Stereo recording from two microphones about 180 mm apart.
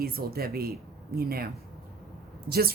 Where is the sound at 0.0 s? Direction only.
60° right (ahead or behind).